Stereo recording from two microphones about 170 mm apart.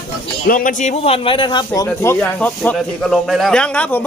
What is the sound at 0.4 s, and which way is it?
A man's voice, 55° left (ahead or behind).